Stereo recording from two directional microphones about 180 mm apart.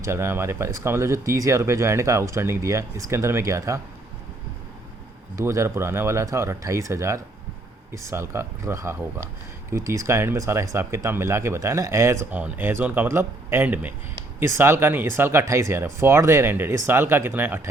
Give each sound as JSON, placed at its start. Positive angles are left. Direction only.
{"t": 0.0, "sound": "speech", "side_deg": -15}
{"t": 5.4, "sound": "speech", "side_deg": -15}